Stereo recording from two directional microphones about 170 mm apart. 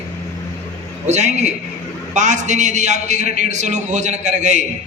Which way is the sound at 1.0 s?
45° right (ahead or behind).